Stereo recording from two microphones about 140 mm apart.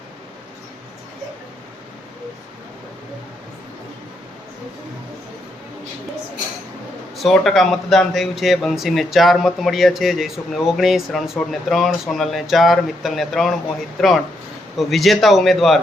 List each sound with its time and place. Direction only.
7.2 s a man's voice: centre (ahead or behind)